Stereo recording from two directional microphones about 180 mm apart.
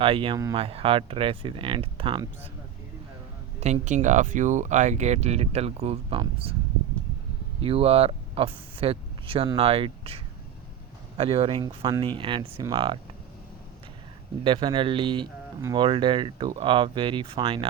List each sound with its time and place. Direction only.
0.0 s speech: 30° right (ahead or behind)
3.6 s speech: 40° right (ahead or behind)
7.6 s speech: 35° right (ahead or behind)
11.2 s speech: 30° right (ahead or behind)
14.4 s speech: 25° right (ahead or behind)